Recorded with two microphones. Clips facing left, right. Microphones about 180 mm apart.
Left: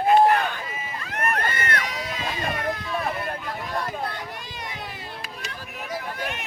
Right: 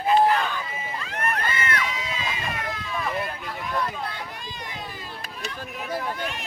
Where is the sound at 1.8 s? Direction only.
65° left (ahead or behind).